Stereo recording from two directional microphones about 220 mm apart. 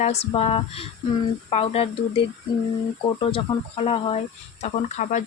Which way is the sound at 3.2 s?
25° left (ahead or behind).